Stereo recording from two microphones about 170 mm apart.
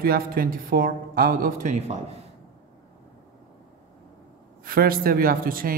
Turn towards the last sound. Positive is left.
turn(degrees=-60)  # may be behind; listen again after turning